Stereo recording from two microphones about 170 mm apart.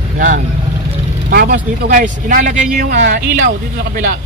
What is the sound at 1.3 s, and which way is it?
Speech, 65° right (ahead or behind).